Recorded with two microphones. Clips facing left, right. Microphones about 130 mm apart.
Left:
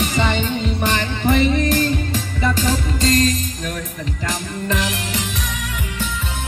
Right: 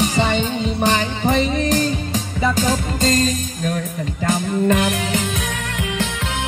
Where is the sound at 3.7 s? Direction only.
50° right (ahead or behind).